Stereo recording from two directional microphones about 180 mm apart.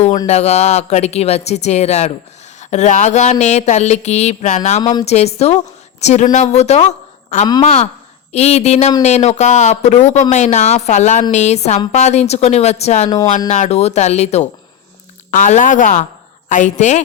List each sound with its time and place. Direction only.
0.3 s a woman's voice: 35° left (ahead or behind)